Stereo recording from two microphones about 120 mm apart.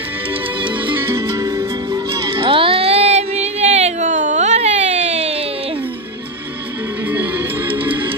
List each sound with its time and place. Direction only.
0.6 s music: 45° right (ahead or behind); by 5.4 s 65° right (ahead or behind)
7.1 s music: 15° right (ahead or behind)